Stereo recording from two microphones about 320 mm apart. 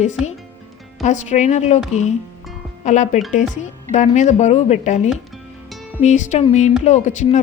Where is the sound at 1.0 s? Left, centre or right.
Left.